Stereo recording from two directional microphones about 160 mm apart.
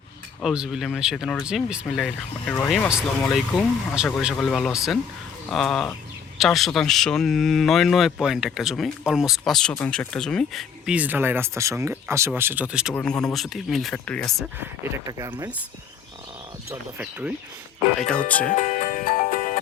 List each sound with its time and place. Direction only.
0.4 s speech: 5° right (ahead or behind)
12.9 s speech: 10° left (ahead or behind)
15.0 s speech: 20° right (ahead or behind)
17.0 s speech: 10° right (ahead or behind)
18.3 s speech: 10° left (ahead or behind)
18.5 s music: 50° left (ahead or behind)